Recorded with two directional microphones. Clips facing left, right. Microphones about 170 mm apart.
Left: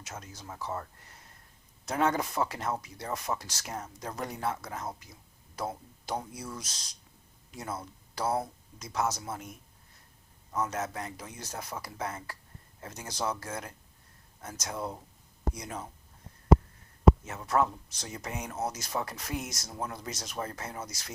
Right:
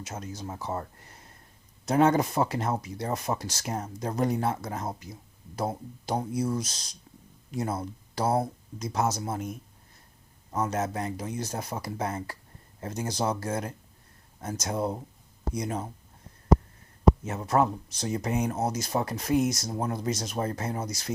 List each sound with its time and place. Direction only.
0.0 s speech: 30° right (ahead or behind)
10.5 s speech: 35° right (ahead or behind)
17.2 s speech: 30° right (ahead or behind)